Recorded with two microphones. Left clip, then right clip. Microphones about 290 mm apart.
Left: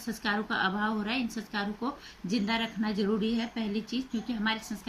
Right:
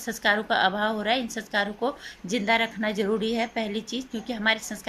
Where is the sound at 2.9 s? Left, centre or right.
Right.